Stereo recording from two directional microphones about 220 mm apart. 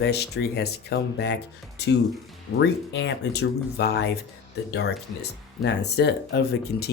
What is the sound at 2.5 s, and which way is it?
Speech, 55° left (ahead or behind).